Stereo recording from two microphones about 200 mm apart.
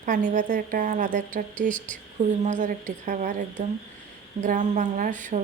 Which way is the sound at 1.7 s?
5° left (ahead or behind).